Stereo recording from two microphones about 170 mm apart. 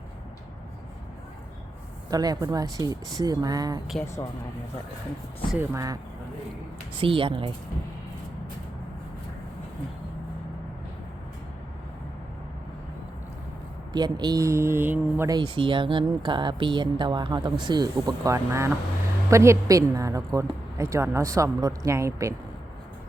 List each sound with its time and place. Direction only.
2.0 s speech: 20° right (ahead or behind)
4.0 s speech: 15° left (ahead or behind)
5.5 s speech: 20° right (ahead or behind)
7.0 s speech: 30° right (ahead or behind)
13.9 s a woman's voice: 25° right (ahead or behind)
15.3 s a woman's voice: 25° right (ahead or behind)